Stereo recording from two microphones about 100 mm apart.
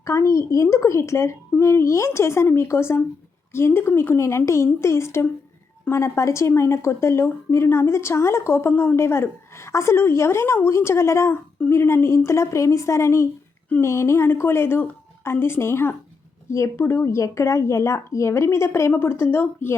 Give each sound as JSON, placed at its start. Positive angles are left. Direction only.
{"t": 0.0, "sound": "speech", "side_deg": 30}